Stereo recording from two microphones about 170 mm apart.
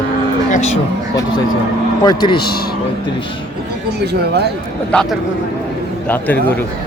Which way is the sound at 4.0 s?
75° right (ahead or behind).